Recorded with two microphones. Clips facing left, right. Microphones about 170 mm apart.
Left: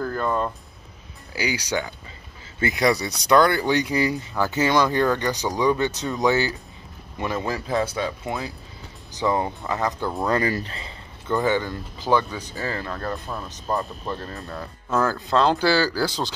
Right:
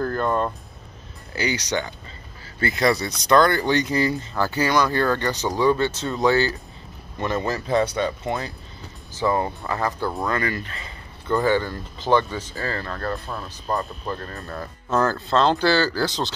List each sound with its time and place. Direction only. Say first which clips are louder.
0.0 s music: right 2 dB; 5° left (ahead or behind)
1.3 s speech: right 1 dB; 10° left (ahead or behind)
9.1 s speech: right 1 dB; 15° left (ahead or behind)
10.2 s speech: left 6 dB; 35° left (ahead or behind)
11.4 s speech: right 2 dB; 15° left (ahead or behind)
13.3 s speech: even; centre (ahead or behind)